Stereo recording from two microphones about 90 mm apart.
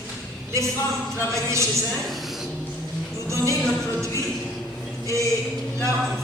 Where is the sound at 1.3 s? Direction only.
35° right (ahead or behind).